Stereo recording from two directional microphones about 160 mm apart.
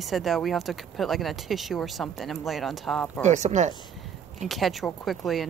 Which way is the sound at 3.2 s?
45° right (ahead or behind).